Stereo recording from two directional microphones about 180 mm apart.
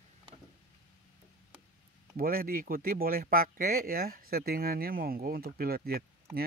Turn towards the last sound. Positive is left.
turn(degrees=-55)  # may be behind; listen again after turning